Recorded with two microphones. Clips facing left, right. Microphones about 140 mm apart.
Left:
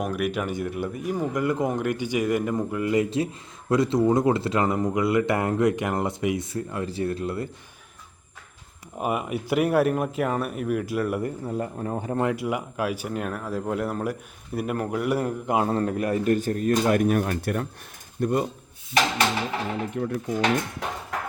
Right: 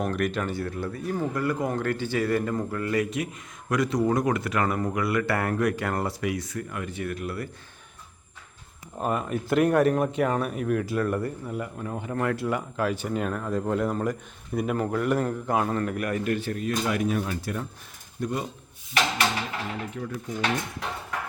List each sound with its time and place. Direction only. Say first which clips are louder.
0.0 s speech: even; 10° left (ahead or behind); by 7.4 s 25° left (ahead or behind)
9.0 s speech: left 1 dB; 10° left (ahead or behind)
11.4 s speech: left 4 dB; 35° left (ahead or behind)
12.1 s speech: left 1 dB; 15° left (ahead or behind)
15.5 s speech: left 3 dB; 30° left (ahead or behind)
16.3 s speech: left 5 dB; 40° left (ahead or behind)
19.9 s speech: left 6 dB; 50° left (ahead or behind)